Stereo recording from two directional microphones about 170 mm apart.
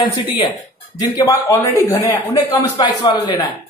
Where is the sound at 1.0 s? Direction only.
20° left (ahead or behind).